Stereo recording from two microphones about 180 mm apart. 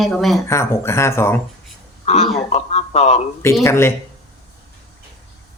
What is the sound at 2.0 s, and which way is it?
A man's voice, 40° left (ahead or behind).